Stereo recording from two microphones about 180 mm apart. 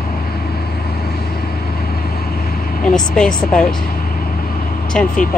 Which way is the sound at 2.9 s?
5° left (ahead or behind).